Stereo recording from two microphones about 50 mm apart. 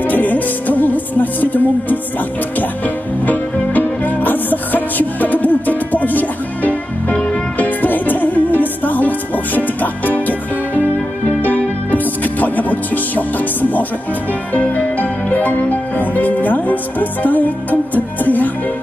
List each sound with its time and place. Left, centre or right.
0.0 s music: left
7.5 s music: left